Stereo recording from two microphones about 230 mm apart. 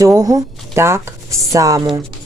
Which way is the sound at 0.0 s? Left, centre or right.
Centre.